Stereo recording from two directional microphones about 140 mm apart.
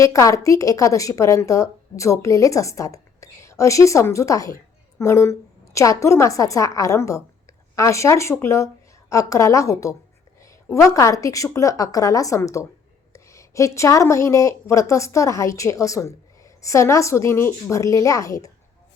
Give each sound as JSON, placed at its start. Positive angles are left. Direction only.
{"t": 0.0, "sound": "a woman's voice", "side_deg": 25}